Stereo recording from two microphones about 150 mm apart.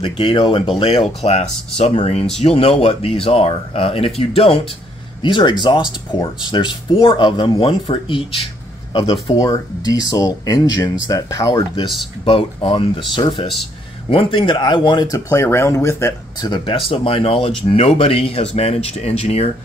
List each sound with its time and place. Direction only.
0.0 s speech: 35° left (ahead or behind)
12.3 s speech: 35° left (ahead or behind)